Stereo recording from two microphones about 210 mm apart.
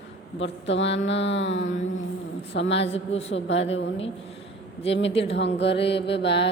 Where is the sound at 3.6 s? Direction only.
30° left (ahead or behind).